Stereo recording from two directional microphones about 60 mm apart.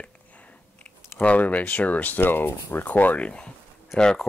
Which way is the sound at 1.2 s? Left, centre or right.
Left.